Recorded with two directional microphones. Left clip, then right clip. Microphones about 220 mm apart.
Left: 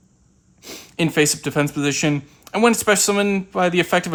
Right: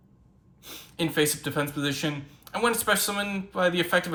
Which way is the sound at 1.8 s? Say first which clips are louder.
Left 8 dB; 60° left (ahead or behind).